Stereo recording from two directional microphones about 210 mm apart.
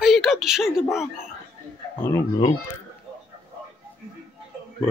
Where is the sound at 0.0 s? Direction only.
Centre (ahead or behind).